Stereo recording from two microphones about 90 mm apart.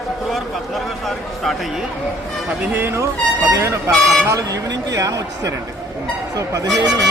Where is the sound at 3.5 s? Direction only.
35° right (ahead or behind).